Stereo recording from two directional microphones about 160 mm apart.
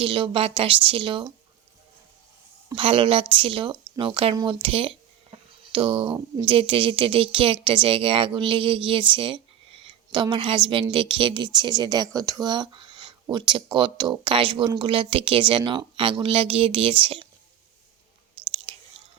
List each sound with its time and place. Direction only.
0.0 s speech: 35° right (ahead or behind)
2.7 s speech: 35° right (ahead or behind)
18.7 s chewing: 35° right (ahead or behind)